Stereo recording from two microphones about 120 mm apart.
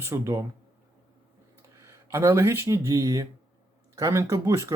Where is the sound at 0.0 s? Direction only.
25° right (ahead or behind).